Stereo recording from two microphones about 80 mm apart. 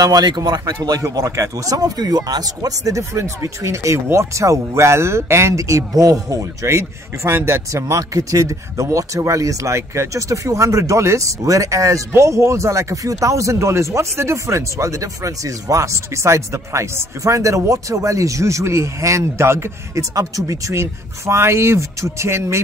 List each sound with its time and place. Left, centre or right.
0.0 s a man's voice: right
1.0 s speech: right
20.2 s speech: right